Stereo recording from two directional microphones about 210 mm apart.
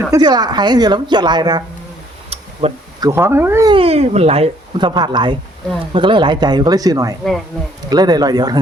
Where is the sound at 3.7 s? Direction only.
30° right (ahead or behind).